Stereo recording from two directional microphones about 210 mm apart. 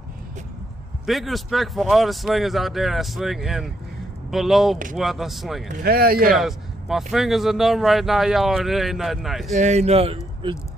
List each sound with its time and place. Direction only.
1.0 s a man's voice: centre (ahead or behind)
5.7 s speech: 45° right (ahead or behind)
6.3 s a man's voice: centre (ahead or behind)
9.5 s speech: 35° right (ahead or behind)